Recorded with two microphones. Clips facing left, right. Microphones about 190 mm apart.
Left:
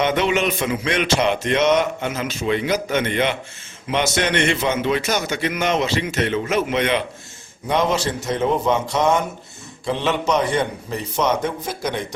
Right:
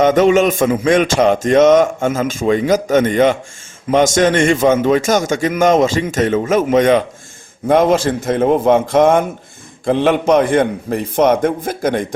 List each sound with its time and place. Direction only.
0.0 s a man's voice: 45° right (ahead or behind)